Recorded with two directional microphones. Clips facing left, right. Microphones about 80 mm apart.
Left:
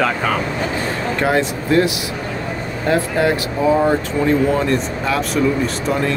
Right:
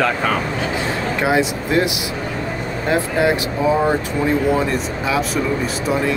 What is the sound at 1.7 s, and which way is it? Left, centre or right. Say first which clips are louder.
Speech: left 5 dB; centre.